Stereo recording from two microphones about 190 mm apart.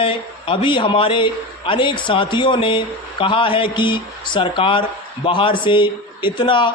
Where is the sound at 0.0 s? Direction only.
25° left (ahead or behind).